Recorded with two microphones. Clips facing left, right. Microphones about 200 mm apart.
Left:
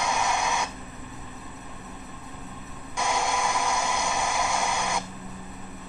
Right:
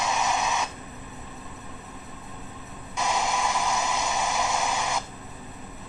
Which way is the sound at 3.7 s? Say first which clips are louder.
Even; centre (ahead or behind).